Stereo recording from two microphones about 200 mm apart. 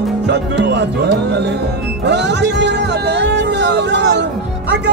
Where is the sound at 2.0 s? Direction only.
60° right (ahead or behind).